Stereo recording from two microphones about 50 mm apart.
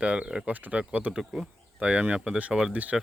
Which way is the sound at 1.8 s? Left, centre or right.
Right.